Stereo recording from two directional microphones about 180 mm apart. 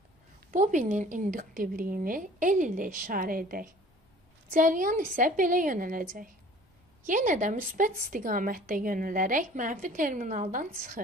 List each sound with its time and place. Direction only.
0.5 s a woman's voice: 45° right (ahead or behind)